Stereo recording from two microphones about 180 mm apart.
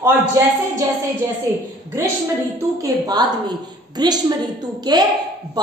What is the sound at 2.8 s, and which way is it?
A woman's voice, 20° right (ahead or behind).